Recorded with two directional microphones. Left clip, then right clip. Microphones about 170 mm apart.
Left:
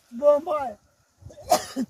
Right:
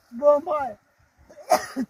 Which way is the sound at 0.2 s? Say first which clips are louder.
Right 1 dB; 20° left (ahead or behind).